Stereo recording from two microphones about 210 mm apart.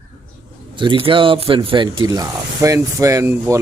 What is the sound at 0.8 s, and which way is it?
Speech, 25° right (ahead or behind).